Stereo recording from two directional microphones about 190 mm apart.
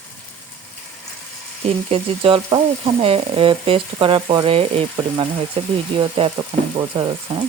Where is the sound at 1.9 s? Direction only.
30° right (ahead or behind).